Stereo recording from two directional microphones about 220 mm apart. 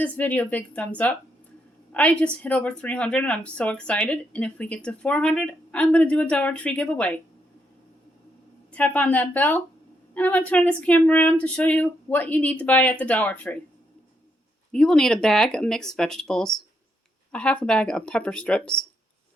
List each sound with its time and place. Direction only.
0.0 s speech: 5° left (ahead or behind)
8.7 s speech: 5° left (ahead or behind)
14.7 s speech: 5° left (ahead or behind)